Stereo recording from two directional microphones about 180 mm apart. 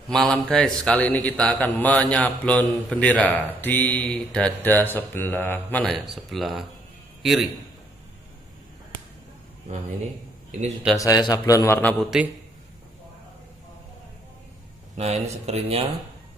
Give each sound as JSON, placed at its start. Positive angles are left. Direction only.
{"t": 0.1, "sound": "a man's voice", "side_deg": 5}
{"t": 11.0, "sound": "a man's voice", "side_deg": 20}
{"t": 12.0, "sound": "a man's voice", "side_deg": -5}
{"t": 15.0, "sound": "speech", "side_deg": -35}